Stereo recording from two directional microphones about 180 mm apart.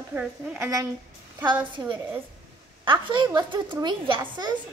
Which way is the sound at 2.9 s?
25° right (ahead or behind).